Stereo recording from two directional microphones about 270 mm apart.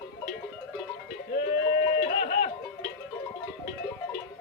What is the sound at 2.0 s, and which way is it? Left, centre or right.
Music, left.